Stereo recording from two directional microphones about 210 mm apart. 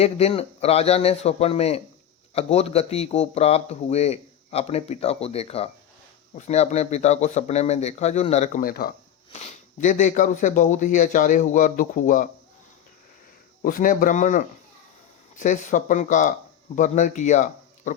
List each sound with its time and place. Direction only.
0.0 s a man's voice: 30° left (ahead or behind); by 9.0 s 45° left (ahead or behind)
9.3 s speech: 30° left (ahead or behind)
13.6 s speech: 40° left (ahead or behind)